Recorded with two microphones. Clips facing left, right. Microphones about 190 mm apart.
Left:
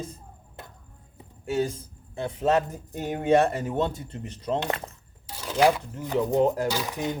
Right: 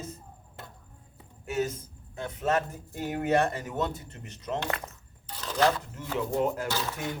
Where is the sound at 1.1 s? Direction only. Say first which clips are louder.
Left 4 dB; 30° left (ahead or behind).